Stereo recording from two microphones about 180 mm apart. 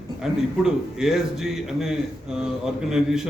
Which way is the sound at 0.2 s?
5° right (ahead or behind).